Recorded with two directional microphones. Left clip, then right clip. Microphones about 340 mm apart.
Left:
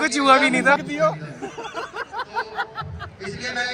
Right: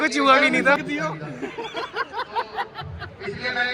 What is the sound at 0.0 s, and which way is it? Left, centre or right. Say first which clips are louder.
Speech: left 1 dB; centre.